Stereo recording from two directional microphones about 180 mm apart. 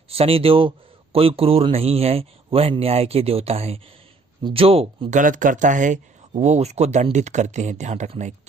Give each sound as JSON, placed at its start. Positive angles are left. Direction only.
{"t": 0.1, "sound": "a man's voice", "side_deg": -30}
{"t": 5.2, "sound": "a man's voice", "side_deg": -45}